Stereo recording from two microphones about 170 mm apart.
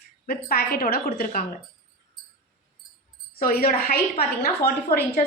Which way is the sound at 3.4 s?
60° left (ahead or behind).